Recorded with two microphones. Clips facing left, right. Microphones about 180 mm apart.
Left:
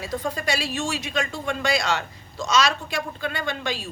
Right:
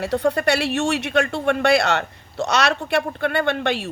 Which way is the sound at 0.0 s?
65° right (ahead or behind).